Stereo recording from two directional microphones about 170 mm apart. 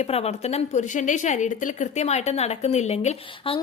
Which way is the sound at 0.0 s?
40° left (ahead or behind).